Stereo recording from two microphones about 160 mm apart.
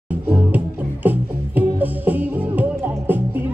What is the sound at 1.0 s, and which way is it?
Music, 10° right (ahead or behind).